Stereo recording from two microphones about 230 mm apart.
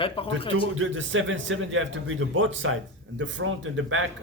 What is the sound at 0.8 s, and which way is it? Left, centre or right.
A man's voice, right.